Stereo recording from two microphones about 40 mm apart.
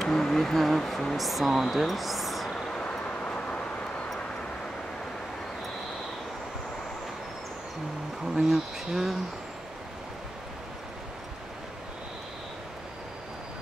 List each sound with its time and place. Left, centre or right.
0.1 s a sound: centre
0.6 s speech: centre
2.5 s vehicle: left
8.3 s speech: centre